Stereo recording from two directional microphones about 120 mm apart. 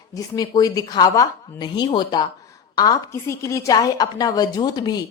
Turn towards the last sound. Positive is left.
turn(degrees=35)  # may be behind; listen again after turning